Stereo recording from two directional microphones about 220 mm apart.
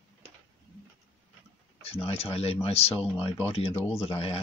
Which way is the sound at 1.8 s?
25° left (ahead or behind).